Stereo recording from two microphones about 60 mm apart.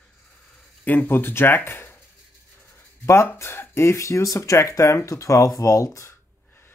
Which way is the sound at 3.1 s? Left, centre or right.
Left.